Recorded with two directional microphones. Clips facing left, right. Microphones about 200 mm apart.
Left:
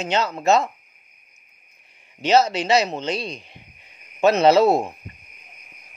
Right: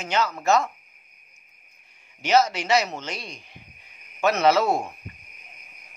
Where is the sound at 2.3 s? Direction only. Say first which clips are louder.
Left 3 dB; 30° left (ahead or behind).